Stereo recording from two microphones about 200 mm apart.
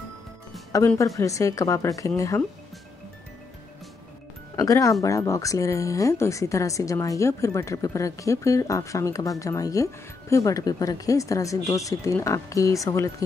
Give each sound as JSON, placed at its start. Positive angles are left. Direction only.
{"t": 0.7, "sound": "a woman's voice", "side_deg": 15}
{"t": 4.6, "sound": "a woman's voice", "side_deg": 15}